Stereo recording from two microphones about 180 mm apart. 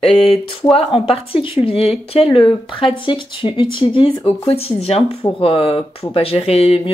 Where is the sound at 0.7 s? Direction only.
30° left (ahead or behind).